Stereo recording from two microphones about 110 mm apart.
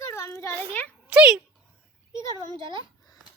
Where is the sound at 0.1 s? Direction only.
25° left (ahead or behind).